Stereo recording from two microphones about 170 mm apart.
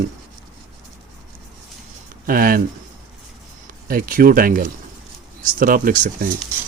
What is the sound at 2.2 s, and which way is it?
Speech, 55° right (ahead or behind).